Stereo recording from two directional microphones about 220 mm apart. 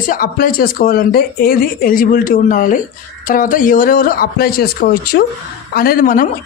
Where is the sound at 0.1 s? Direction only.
40° left (ahead or behind).